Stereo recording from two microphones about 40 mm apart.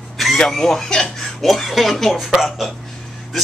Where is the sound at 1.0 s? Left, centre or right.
Centre.